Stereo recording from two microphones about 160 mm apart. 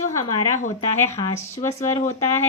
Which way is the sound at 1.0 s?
15° left (ahead or behind).